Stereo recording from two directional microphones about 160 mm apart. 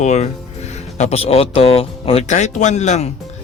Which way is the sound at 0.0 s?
45° left (ahead or behind).